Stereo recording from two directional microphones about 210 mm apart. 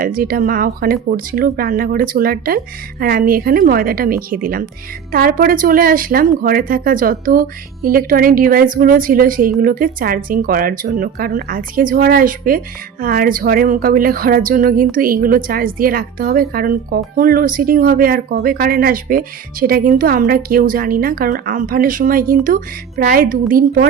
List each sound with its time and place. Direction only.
0.0 s speech: 45° right (ahead or behind)